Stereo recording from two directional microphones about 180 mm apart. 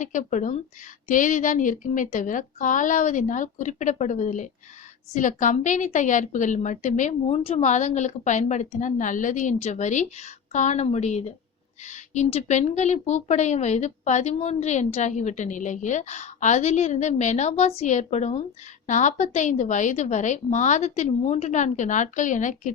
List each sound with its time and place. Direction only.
0.0 s a woman's voice: 45° left (ahead or behind)